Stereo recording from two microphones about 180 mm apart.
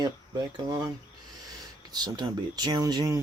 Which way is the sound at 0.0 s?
20° right (ahead or behind).